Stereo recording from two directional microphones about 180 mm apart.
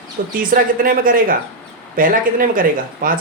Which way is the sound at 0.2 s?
50° right (ahead or behind).